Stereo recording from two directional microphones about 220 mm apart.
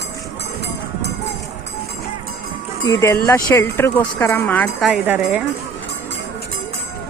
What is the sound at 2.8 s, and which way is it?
Speech, 15° left (ahead or behind).